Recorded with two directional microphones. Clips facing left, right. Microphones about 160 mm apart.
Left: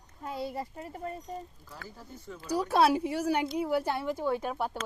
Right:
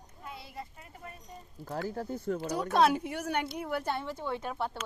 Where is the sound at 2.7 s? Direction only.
5° left (ahead or behind).